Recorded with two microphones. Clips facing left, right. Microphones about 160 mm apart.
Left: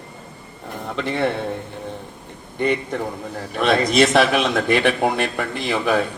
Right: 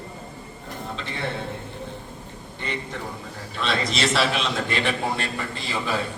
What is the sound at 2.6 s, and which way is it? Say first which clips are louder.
A man's voice: left 10 dB; 55° left (ahead or behind).